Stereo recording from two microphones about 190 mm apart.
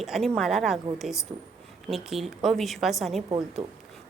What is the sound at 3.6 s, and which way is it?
Speech, 35° right (ahead or behind).